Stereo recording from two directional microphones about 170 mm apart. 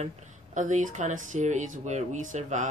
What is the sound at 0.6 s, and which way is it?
Speech, 45° right (ahead or behind).